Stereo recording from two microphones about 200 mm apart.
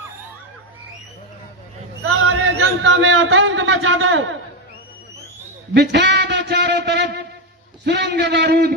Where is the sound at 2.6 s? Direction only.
75° right (ahead or behind).